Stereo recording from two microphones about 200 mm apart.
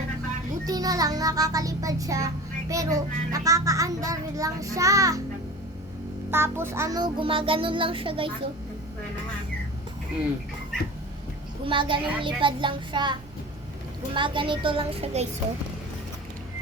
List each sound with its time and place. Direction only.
0.6 s child singing: 20° right (ahead or behind)
6.3 s music: 10° right (ahead or behind)
11.6 s music: 25° right (ahead or behind)